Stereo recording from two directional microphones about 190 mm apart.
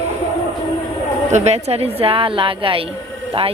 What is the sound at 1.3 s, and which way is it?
A woman's voice, 35° right (ahead or behind).